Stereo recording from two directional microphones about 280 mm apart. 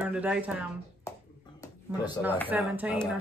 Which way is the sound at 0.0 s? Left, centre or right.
Centre.